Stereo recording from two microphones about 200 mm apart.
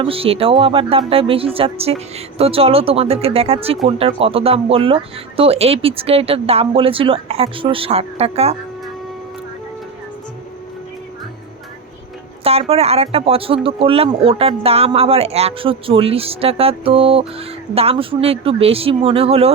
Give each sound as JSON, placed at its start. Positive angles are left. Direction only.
{"t": 0.0, "sound": "speech", "side_deg": -30}
{"t": 12.4, "sound": "speech", "side_deg": -30}